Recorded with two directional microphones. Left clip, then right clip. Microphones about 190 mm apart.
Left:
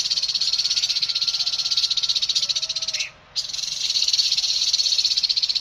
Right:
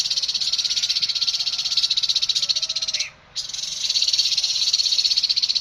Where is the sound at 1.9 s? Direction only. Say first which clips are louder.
Right 1 dB; 10° right (ahead or behind).